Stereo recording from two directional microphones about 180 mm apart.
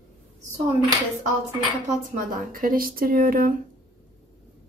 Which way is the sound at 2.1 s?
50° right (ahead or behind).